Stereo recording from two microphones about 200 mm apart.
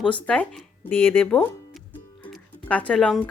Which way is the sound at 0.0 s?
5° left (ahead or behind).